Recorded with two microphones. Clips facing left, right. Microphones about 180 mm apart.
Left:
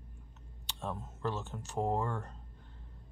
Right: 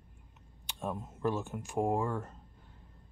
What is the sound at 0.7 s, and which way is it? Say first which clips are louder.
Speech: right 3 dB; 15° right (ahead or behind).